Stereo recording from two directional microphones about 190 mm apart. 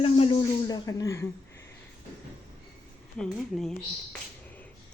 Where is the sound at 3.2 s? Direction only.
Centre (ahead or behind).